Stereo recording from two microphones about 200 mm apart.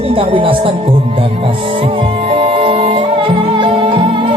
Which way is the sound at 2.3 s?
25° right (ahead or behind).